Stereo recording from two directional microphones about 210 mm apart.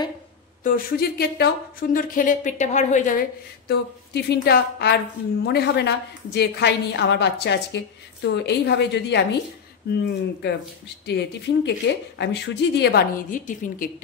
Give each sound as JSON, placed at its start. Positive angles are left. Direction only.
{"t": 0.7, "sound": "speech", "side_deg": 45}
{"t": 11.1, "sound": "speech", "side_deg": 55}